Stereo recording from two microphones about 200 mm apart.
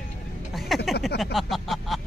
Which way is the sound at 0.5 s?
Centre (ahead or behind).